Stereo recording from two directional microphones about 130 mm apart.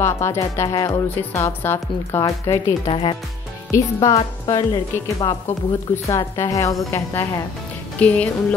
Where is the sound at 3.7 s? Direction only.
25° left (ahead or behind).